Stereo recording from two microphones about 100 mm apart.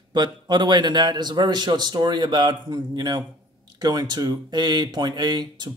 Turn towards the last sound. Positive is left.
turn(degrees=-45)  # may be behind; listen again after turning